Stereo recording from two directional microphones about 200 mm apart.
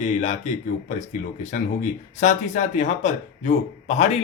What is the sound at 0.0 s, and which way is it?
Speech, 35° left (ahead or behind).